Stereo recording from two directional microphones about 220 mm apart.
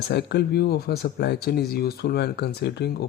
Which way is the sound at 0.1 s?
50° left (ahead or behind).